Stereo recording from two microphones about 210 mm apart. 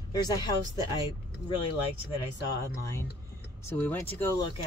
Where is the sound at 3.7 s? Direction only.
10° left (ahead or behind).